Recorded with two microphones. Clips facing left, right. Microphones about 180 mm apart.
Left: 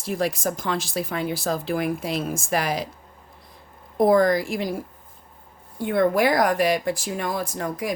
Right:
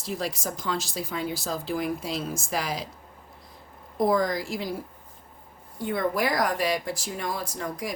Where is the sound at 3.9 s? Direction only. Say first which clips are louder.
Left 6 dB; 65° left (ahead or behind).